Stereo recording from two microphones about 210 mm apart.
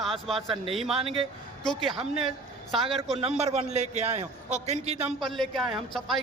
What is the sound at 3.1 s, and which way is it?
A man's voice, 30° right (ahead or behind).